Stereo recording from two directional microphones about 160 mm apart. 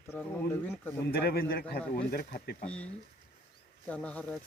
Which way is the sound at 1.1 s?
70° left (ahead or behind).